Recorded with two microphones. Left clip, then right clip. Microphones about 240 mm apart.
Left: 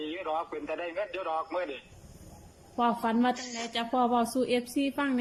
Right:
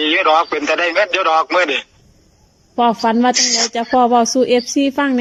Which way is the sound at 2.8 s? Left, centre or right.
Right.